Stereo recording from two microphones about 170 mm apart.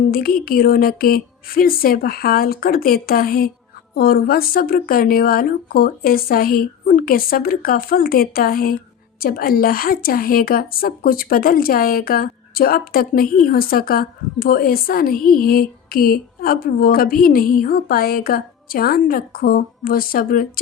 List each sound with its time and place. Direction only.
0.1 s a woman's voice: 60° left (ahead or behind)